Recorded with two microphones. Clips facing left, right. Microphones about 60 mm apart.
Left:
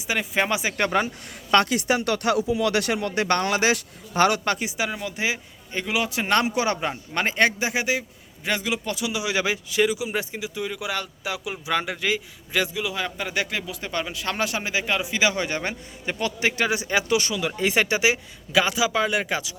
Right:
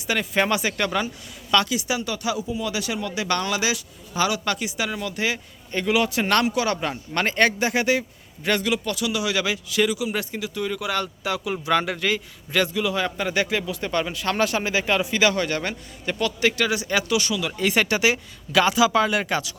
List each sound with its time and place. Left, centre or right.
0.1 s a man's voice: centre
0.8 s speech: left
2.0 s speech: left
4.4 s a man's voice: left; by 6.3 s centre
6.3 s speech: left
6.7 s a man's voice: centre; by 17.5 s left
17.6 s a man's voice: centre